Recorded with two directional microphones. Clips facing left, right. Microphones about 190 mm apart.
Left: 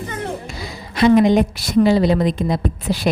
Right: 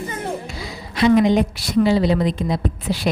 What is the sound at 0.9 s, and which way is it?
A woman's voice, 50° left (ahead or behind).